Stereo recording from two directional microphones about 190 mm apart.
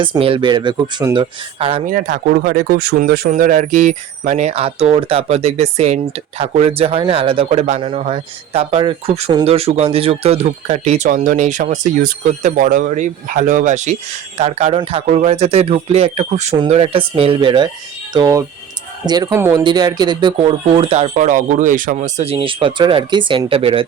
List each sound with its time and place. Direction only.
0.0 s speech: 25° right (ahead or behind)
1.9 s speech: 45° right (ahead or behind); by 23.8 s 30° right (ahead or behind)